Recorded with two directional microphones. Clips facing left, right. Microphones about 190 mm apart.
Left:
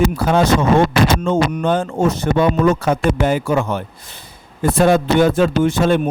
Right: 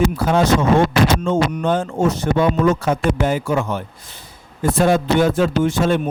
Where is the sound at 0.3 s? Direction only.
65° left (ahead or behind).